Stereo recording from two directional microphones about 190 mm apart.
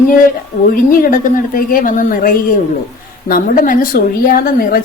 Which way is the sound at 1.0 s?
45° left (ahead or behind).